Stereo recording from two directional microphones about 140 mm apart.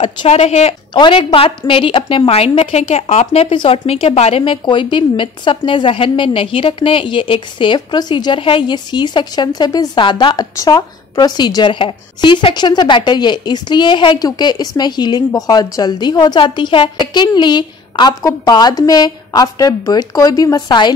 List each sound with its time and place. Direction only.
0.0 s speech: 45° left (ahead or behind)
0.9 s a woman's voice: 35° left (ahead or behind)